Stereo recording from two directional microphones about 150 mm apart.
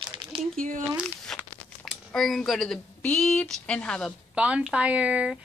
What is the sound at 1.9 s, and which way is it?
Speech, centre (ahead or behind).